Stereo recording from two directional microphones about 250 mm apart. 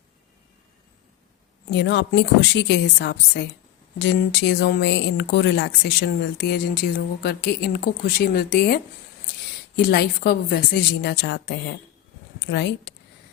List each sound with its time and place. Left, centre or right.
1.7 s a woman's voice: left